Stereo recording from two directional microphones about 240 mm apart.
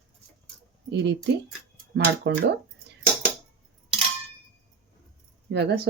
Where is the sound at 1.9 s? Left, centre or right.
Right.